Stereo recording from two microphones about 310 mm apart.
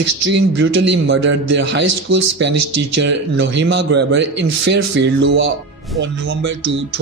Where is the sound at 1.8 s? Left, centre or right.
Right.